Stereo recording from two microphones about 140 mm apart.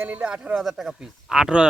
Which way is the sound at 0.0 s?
10° right (ahead or behind).